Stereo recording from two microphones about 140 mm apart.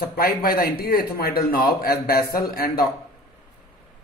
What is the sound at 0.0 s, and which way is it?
A man's voice, 90° left.